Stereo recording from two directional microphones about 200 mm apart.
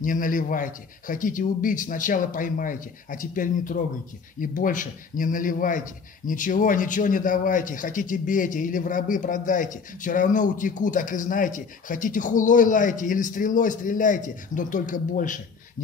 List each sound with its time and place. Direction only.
0.0 s a man's voice: 40° left (ahead or behind)